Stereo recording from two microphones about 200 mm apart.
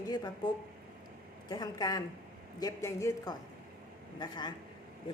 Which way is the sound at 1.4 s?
20° left (ahead or behind).